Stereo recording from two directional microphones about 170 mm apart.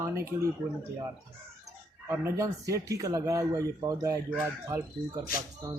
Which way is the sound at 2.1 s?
15° right (ahead or behind).